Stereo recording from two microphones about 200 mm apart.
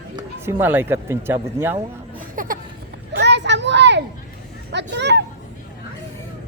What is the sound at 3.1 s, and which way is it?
Children playing, 60° right (ahead or behind).